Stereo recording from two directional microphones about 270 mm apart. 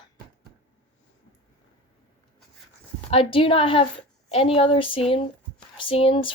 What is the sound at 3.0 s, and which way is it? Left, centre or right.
A woman's voice, left.